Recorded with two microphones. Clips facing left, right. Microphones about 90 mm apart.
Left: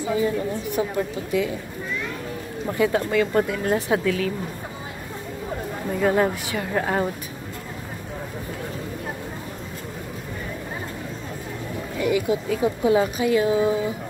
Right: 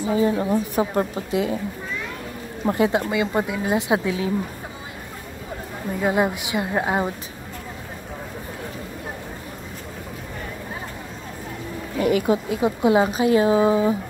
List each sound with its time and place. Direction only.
0.0 s a woman's voice: 35° right (ahead or behind)
1.3 s speech: 30° right (ahead or behind)
2.6 s speech: 30° right (ahead or behind)
3.1 s a woman's voice: 10° right (ahead or behind)
3.7 s speech: 20° right (ahead or behind)
5.9 s a woman's voice: 10° right (ahead or behind)
12.0 s speech: 40° right (ahead or behind)
12.4 s speech: 20° right (ahead or behind)